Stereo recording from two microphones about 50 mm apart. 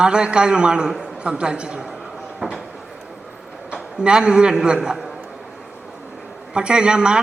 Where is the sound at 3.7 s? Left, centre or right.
Centre.